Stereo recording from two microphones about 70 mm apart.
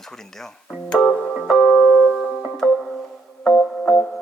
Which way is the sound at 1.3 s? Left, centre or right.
Centre.